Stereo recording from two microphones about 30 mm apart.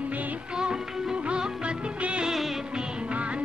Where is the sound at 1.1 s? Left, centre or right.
Right.